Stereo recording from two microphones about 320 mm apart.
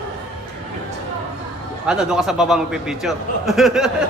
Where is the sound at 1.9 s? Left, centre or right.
Centre.